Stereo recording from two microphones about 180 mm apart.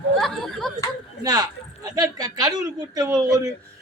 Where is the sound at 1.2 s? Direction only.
20° right (ahead or behind).